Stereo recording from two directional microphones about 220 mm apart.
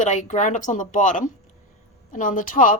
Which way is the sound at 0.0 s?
35° left (ahead or behind).